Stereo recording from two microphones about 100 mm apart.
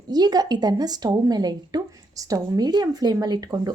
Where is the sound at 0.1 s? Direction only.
40° right (ahead or behind).